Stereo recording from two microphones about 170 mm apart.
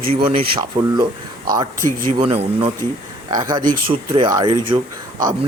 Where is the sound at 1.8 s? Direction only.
15° left (ahead or behind).